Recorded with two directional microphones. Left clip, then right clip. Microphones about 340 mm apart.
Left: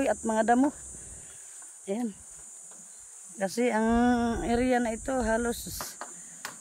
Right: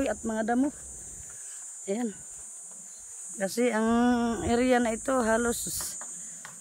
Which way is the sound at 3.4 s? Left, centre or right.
Centre.